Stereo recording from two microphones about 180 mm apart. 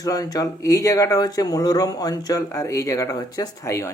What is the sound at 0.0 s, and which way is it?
Speech, 20° left (ahead or behind).